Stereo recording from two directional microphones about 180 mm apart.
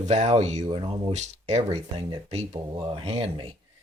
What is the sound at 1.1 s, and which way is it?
Speech, 40° right (ahead or behind).